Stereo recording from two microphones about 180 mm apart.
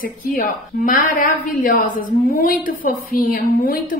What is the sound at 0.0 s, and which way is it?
A woman's voice, 50° left (ahead or behind).